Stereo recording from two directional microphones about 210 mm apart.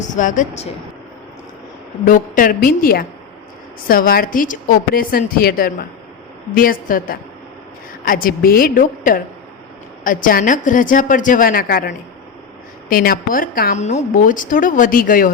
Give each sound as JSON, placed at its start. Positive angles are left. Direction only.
{"t": 0.1, "sound": "speech", "side_deg": 35}
{"t": 2.0, "sound": "a woman's voice", "side_deg": 40}
{"t": 12.9, "sound": "speech", "side_deg": 45}